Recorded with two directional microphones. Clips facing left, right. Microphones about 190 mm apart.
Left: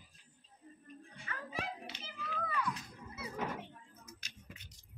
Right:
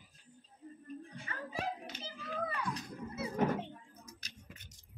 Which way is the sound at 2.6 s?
25° right (ahead or behind).